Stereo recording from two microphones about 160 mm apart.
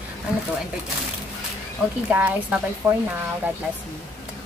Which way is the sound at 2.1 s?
10° right (ahead or behind).